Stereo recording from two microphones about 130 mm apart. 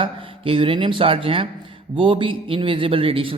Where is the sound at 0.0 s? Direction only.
45° right (ahead or behind).